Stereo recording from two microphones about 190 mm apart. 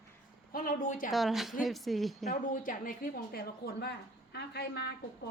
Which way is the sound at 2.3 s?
45° left (ahead or behind).